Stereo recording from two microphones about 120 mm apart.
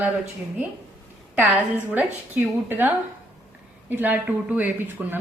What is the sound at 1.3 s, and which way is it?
Speech, 15° right (ahead or behind).